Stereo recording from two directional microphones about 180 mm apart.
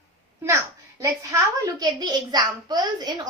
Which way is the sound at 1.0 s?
15° right (ahead or behind).